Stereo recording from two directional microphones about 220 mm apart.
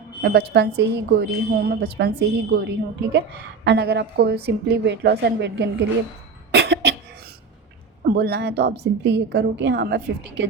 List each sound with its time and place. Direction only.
0.2 s a woman's voice: 50° right (ahead or behind)
6.5 s cough: 50° right (ahead or behind)
8.0 s a woman's voice: 45° right (ahead or behind)